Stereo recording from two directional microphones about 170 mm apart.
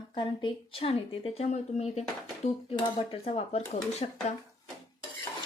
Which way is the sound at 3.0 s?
35° left (ahead or behind).